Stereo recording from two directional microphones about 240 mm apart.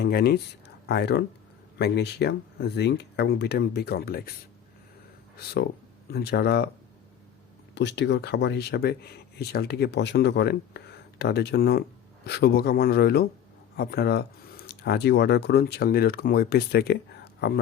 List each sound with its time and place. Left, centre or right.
0.0 s speech: left
6.1 s speech: left
7.8 s speech: left